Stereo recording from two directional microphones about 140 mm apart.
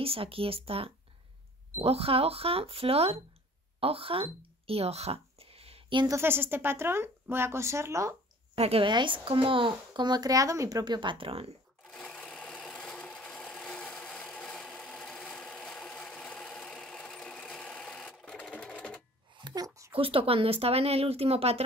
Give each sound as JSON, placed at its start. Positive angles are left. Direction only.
{"t": 0.0, "sound": "speech", "side_deg": -40}
{"t": 3.8, "sound": "a sound", "side_deg": -40}
{"t": 6.0, "sound": "speech", "side_deg": -20}
{"t": 8.5, "sound": "speech", "side_deg": -45}
{"t": 11.8, "sound": "sewing machine", "side_deg": 5}
{"t": 19.4, "sound": "a sound", "side_deg": -25}
{"t": 19.9, "sound": "speech", "side_deg": -40}